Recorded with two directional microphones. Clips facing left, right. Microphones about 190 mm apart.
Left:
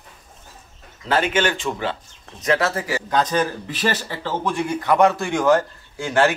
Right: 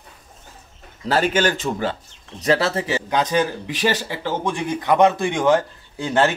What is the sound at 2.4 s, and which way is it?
Speech, 30° right (ahead or behind).